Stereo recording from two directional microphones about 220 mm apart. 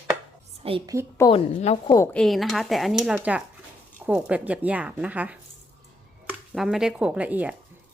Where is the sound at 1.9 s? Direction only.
10° left (ahead or behind).